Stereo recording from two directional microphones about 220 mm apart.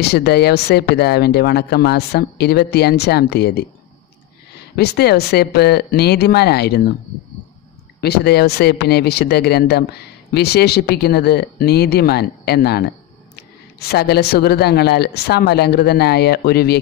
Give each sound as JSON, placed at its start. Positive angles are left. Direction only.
{"t": 0.0, "sound": "speech", "side_deg": 45}
{"t": 4.7, "sound": "speech", "side_deg": 45}
{"t": 8.0, "sound": "speech", "side_deg": 45}